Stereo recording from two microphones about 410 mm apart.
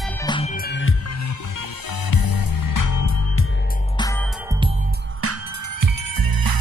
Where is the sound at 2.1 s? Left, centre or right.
Left.